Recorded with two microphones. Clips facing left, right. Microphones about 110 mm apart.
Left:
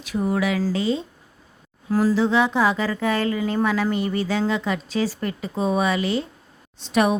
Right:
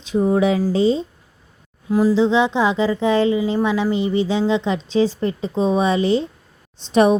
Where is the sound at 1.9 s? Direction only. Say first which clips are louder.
Right 4 dB; 15° right (ahead or behind).